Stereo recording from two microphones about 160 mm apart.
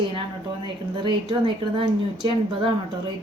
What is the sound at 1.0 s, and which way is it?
A woman's voice, 30° right (ahead or behind).